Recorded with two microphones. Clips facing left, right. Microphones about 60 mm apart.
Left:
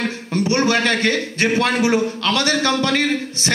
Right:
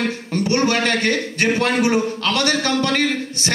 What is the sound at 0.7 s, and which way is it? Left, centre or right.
A man's voice, right.